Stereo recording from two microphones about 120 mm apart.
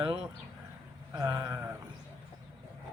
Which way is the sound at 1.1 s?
30° right (ahead or behind).